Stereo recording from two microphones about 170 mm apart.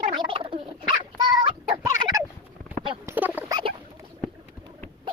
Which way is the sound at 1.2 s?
25° right (ahead or behind).